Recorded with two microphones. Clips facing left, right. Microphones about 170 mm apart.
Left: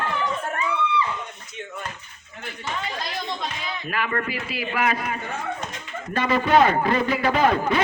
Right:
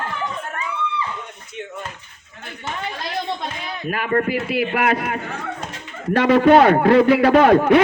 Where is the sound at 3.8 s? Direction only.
45° right (ahead or behind); by 7.8 s 65° right (ahead or behind).